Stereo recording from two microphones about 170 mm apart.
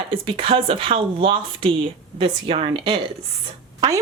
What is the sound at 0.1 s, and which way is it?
Speech, 30° right (ahead or behind).